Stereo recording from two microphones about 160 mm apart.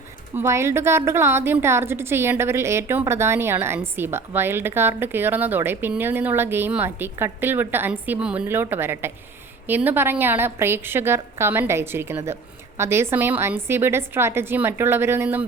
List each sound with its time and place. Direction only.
0.3 s speech: 15° right (ahead or behind)